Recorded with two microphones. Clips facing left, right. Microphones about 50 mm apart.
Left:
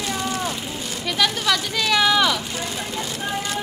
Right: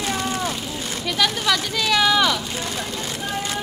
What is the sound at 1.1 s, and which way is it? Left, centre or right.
Speech, centre.